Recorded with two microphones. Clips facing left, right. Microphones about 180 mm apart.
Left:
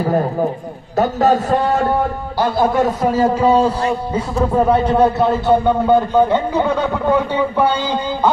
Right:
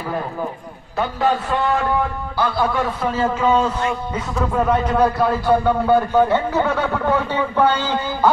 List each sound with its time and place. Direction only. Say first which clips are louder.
0.0 s a man's voice: left 8 dB; 40° left (ahead or behind); by 8.3 s 15° left (ahead or behind)